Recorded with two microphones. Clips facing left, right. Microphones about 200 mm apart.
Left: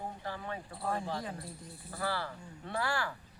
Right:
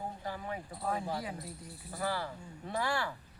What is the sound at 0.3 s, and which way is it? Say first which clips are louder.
Speech: right 1 dB; 15° right (ahead or behind).